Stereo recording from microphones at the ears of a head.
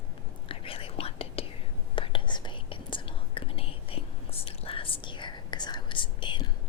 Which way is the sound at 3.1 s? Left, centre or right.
Left.